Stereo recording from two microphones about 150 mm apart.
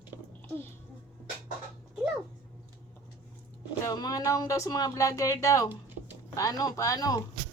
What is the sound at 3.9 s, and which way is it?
Speech, 25° left (ahead or behind).